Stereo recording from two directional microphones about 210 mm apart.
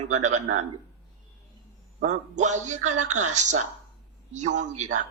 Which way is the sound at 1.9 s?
35° right (ahead or behind).